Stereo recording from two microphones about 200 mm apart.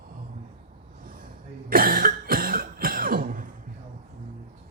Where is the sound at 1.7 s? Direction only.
45° right (ahead or behind).